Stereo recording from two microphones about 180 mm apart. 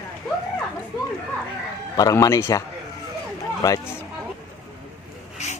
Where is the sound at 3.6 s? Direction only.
20° left (ahead or behind).